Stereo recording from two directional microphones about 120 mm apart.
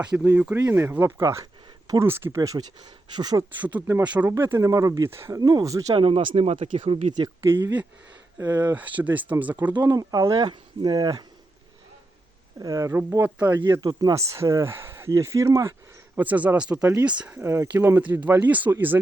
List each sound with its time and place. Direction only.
0.2 s speech: 15° right (ahead or behind); by 3.4 s 35° right (ahead or behind)
3.5 s speech: 15° right (ahead or behind)
5.4 s speech: 35° right (ahead or behind)
5.9 s speech: 50° right (ahead or behind)
7.4 s speech: 20° right (ahead or behind)
9.0 s speech: 15° right (ahead or behind)
9.7 s speech: 30° right (ahead or behind)
12.5 s speech: 30° right (ahead or behind)
13.5 s speech: 30° right (ahead or behind)
16.1 s speech: 15° right (ahead or behind)
17.4 s speech: 20° right (ahead or behind)